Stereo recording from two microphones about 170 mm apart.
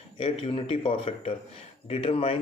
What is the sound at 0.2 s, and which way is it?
Speech, 35° left (ahead or behind).